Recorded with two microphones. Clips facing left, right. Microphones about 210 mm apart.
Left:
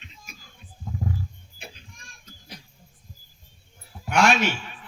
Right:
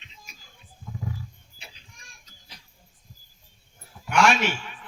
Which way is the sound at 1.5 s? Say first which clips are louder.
Left 7 dB; 50° left (ahead or behind).